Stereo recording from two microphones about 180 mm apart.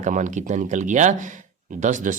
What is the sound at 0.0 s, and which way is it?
A man's voice, 45° right (ahead or behind).